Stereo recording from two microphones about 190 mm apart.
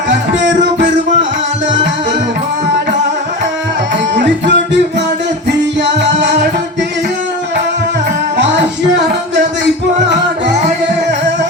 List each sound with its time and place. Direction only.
0.4 s music: 70° right (ahead or behind)
4.1 s music: 65° right (ahead or behind)